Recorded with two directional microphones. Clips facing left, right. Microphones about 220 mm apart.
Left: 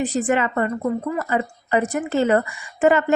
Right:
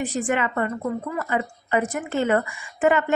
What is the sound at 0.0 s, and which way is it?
A woman's voice, 35° left (ahead or behind).